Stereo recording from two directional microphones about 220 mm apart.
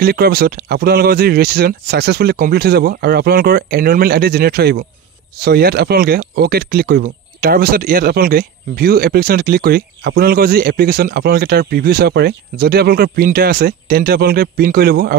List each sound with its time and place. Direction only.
0.0 s speech: 45° right (ahead or behind)